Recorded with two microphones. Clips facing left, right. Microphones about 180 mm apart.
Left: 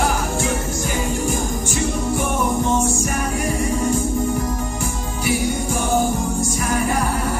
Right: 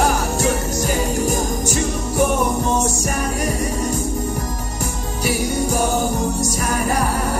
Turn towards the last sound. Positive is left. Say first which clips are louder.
# even
turn(degrees=-40)  # may be behind; listen again after turning